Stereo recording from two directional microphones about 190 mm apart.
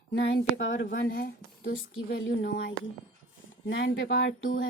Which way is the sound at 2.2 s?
70° left (ahead or behind).